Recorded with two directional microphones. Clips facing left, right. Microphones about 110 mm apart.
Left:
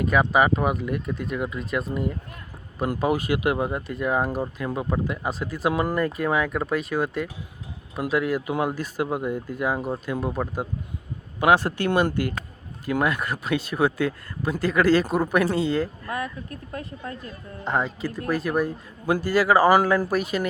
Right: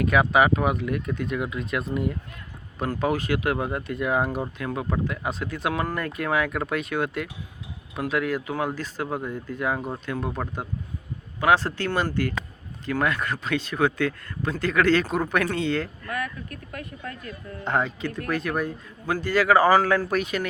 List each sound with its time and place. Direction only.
0.1 s speech: centre (ahead or behind)
16.0 s speech: 25° left (ahead or behind)
17.6 s speech: centre (ahead or behind)